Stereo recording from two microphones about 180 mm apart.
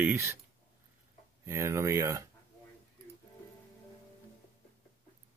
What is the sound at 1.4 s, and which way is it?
Speech, 15° right (ahead or behind).